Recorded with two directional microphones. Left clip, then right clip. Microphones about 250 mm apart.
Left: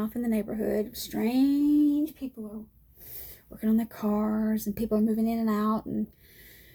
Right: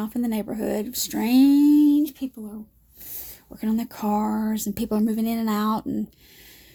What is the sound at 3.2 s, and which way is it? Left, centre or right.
Speech, right.